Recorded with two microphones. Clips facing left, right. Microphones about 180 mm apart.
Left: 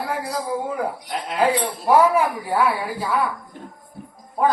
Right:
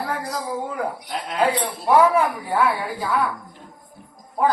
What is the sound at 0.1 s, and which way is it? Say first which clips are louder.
A man's voice: left 2 dB; 10° left (ahead or behind).